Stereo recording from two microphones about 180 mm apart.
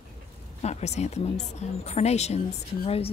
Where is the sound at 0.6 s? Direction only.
40° left (ahead or behind).